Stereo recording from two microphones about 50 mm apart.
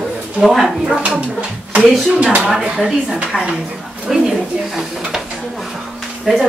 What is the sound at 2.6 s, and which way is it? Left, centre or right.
Speech, centre.